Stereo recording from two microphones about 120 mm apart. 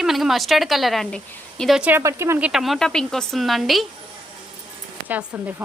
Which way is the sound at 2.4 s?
Centre (ahead or behind).